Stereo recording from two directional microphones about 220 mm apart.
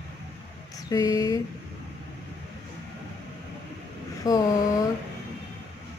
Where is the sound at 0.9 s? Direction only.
15° left (ahead or behind).